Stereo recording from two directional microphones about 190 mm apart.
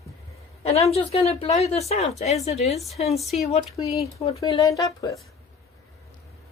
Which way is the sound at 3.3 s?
35° left (ahead or behind).